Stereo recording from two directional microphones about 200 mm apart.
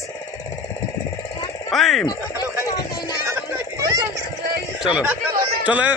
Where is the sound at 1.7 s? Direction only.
Centre (ahead or behind).